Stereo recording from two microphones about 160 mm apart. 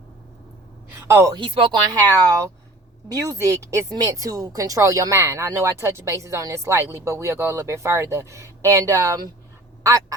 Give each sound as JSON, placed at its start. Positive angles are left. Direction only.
{"t": 0.9, "sound": "a woman's voice", "side_deg": -15}
{"t": 1.4, "sound": "speech", "side_deg": -30}
{"t": 9.8, "sound": "quack", "side_deg": -20}